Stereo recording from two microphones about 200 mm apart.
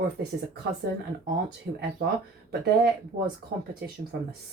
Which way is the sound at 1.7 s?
50° right (ahead or behind).